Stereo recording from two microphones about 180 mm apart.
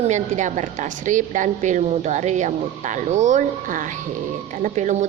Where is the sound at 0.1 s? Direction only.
40° right (ahead or behind).